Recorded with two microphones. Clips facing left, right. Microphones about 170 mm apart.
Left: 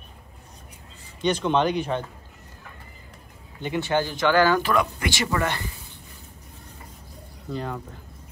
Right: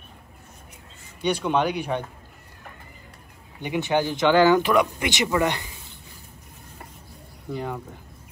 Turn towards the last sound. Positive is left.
turn(degrees=-15)  # may be behind; listen again after turning